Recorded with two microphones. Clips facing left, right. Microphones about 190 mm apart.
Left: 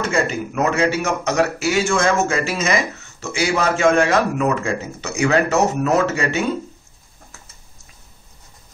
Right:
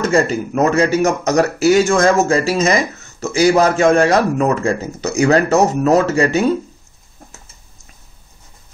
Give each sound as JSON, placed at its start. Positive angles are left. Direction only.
{"t": 0.0, "sound": "a man's voice", "side_deg": -35}